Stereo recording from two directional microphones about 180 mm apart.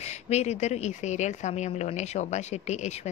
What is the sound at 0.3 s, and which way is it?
Speech, 40° left (ahead or behind).